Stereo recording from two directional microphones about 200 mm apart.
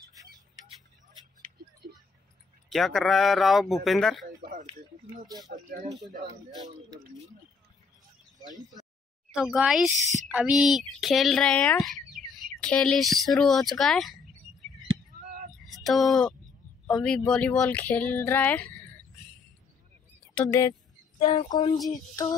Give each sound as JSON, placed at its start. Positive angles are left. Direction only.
{"t": 0.1, "sound": "tick", "side_deg": -15}
{"t": 2.7, "sound": "speech", "side_deg": 0}
{"t": 4.4, "sound": "a sound", "side_deg": -45}
{"t": 5.5, "sound": "speech", "side_deg": -40}
{"t": 9.3, "sound": "speech", "side_deg": 0}
{"t": 15.6, "sound": "a man's voice", "side_deg": 0}
{"t": 21.3, "sound": "a sound", "side_deg": 20}